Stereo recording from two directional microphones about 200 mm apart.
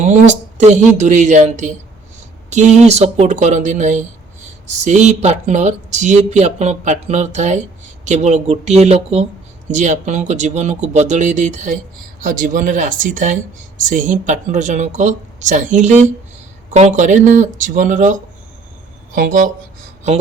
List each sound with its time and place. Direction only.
0.0 s speech: 35° right (ahead or behind)